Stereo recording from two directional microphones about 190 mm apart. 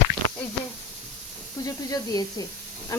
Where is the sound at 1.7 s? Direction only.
20° left (ahead or behind).